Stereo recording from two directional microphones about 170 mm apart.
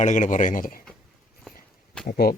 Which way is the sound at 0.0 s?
45° left (ahead or behind).